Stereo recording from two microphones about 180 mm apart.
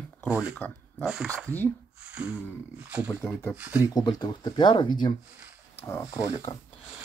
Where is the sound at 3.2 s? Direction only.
10° left (ahead or behind).